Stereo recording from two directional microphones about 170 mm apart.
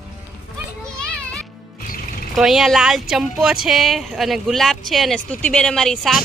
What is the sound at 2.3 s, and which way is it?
Speech, centre (ahead or behind).